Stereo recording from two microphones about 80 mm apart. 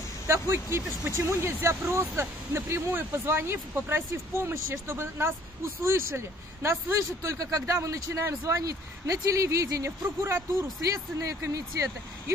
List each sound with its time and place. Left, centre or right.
0.3 s speech: right